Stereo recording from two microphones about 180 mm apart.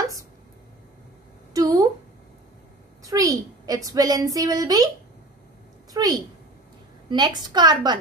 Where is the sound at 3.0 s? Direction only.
20° right (ahead or behind).